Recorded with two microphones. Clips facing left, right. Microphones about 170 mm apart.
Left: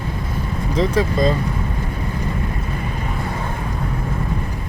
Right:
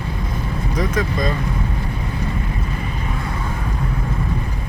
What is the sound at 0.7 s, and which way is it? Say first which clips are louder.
Vehicle: left 4 dB; 25° left (ahead or behind).